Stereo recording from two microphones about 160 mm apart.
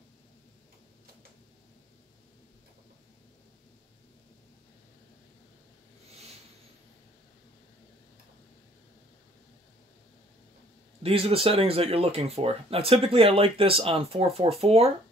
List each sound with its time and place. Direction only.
11.0 s speech: 35° right (ahead or behind)